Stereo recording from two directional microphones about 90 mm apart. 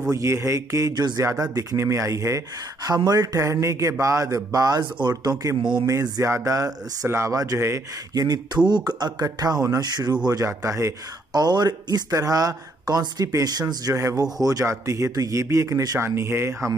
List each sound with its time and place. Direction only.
0.1 s speech: 30° right (ahead or behind)
3.3 s speech: 35° right (ahead or behind)
5.6 s speech: 60° right (ahead or behind)
5.9 s speech: 35° right (ahead or behind)
8.1 s speech: 45° right (ahead or behind)
10.4 s speech: 30° right (ahead or behind)
11.3 s speech: 50° right (ahead or behind)
12.1 s speech: 40° right (ahead or behind)